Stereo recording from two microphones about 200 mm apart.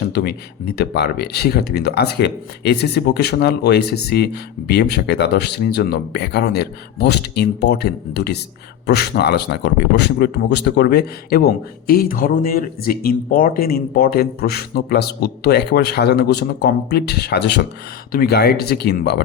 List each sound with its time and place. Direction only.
0.1 s speech: 55° left (ahead or behind)